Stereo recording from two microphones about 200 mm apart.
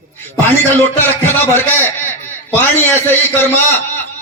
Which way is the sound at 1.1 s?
10° left (ahead or behind).